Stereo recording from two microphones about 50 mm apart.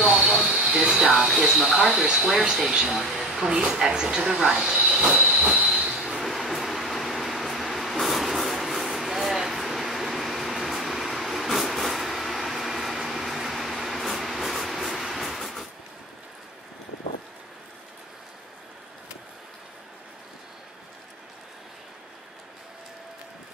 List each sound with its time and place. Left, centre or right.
0.1 s train: centre
0.8 s speech: centre
2.7 s speech: centre; by 5.7 s right
5.9 s a sound: centre